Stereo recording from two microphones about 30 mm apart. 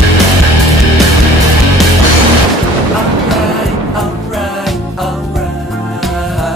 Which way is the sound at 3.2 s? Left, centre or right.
Centre.